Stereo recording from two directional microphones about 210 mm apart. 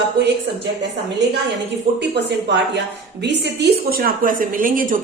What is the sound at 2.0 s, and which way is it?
A woman's voice, 55° right (ahead or behind).